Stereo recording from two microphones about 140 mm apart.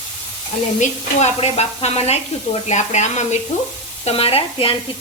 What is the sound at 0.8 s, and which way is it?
Speech, 50° left (ahead or behind).